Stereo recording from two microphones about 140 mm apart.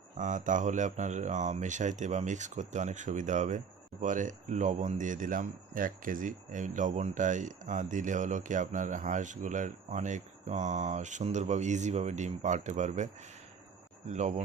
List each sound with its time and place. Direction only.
0.2 s speech: 65° right (ahead or behind)
14.1 s speech: 55° right (ahead or behind)